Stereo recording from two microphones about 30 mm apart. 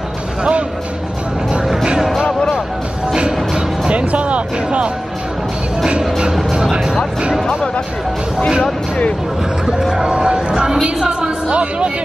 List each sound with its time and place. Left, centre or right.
0.4 s music: right
3.2 s music: right
4.1 s music: right
6.5 s music: right
7.4 s speech: left
10.1 s music: right
10.8 s a woman's voice: centre
11.1 s a sound: right